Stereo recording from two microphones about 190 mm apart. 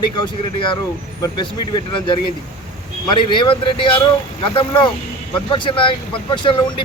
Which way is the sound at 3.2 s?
25° left (ahead or behind).